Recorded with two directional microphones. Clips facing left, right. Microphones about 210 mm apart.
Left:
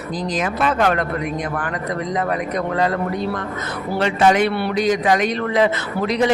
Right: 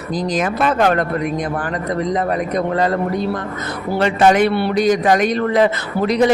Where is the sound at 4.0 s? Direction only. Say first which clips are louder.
Right 3 dB; 45° right (ahead or behind).